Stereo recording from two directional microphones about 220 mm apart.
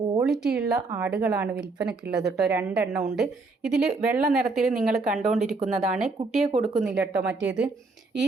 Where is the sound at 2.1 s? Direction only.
5° right (ahead or behind).